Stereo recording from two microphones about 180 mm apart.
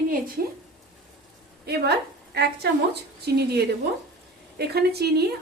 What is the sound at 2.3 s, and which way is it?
Speech, 65° right (ahead or behind).